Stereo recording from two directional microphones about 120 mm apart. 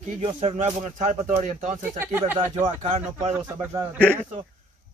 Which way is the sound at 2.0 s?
20° right (ahead or behind).